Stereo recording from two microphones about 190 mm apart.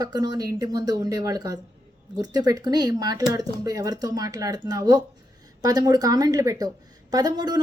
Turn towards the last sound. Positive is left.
turn(degrees=-20)  # may be behind; listen again after turning